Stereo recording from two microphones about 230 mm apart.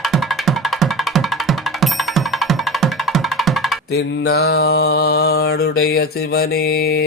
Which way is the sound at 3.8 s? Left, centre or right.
Left.